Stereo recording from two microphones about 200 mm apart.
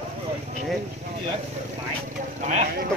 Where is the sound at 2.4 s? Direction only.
35° right (ahead or behind).